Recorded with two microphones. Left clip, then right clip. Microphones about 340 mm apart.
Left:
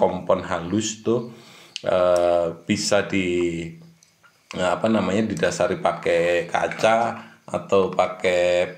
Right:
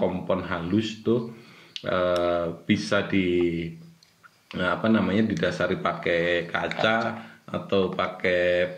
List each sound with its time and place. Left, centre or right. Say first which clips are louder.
0.3 s speech: left 5 dB; centre